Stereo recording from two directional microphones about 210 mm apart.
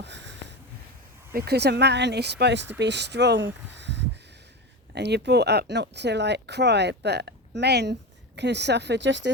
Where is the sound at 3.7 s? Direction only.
55° right (ahead or behind).